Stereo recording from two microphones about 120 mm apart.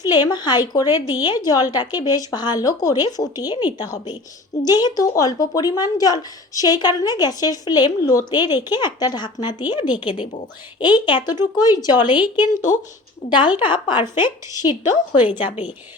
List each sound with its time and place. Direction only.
0.1 s a woman's voice: 35° left (ahead or behind)